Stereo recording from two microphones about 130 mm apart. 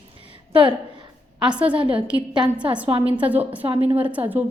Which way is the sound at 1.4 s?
10° right (ahead or behind).